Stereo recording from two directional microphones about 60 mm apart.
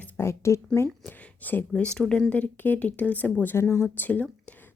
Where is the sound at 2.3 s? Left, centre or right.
Left.